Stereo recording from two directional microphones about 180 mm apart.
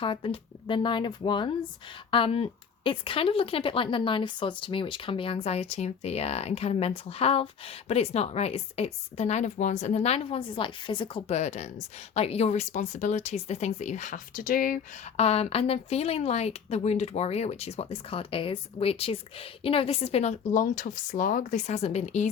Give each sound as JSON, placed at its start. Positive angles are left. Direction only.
{"t": 0.0, "sound": "a woman's voice", "side_deg": 30}
{"t": 15.2, "sound": "a woman's voice", "side_deg": 35}
{"t": 20.5, "sound": "speech", "side_deg": 45}